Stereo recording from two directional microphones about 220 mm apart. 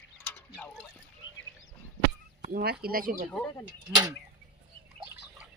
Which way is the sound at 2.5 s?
40° right (ahead or behind).